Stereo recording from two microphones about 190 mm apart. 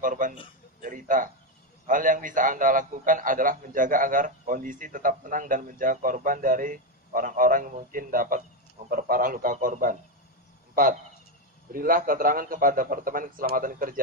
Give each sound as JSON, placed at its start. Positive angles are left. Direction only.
{"t": 0.0, "sound": "a man's voice", "side_deg": -45}
{"t": 10.7, "sound": "a sound", "side_deg": -45}
{"t": 11.7, "sound": "a man's voice", "side_deg": -50}